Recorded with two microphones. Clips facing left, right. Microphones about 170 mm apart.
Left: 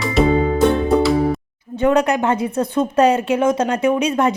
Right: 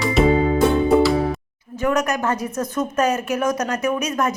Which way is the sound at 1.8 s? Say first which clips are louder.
Left 5 dB; 30° left (ahead or behind).